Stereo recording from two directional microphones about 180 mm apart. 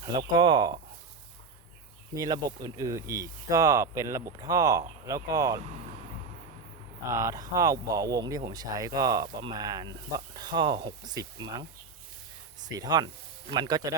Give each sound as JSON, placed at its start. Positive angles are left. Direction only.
{"t": 0.0, "sound": "speech", "side_deg": -25}
{"t": 2.1, "sound": "speech", "side_deg": -20}
{"t": 7.1, "sound": "speech", "side_deg": -15}
{"t": 12.6, "sound": "speech", "side_deg": -20}